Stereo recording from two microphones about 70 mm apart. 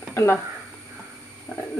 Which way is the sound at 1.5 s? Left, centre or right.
Left.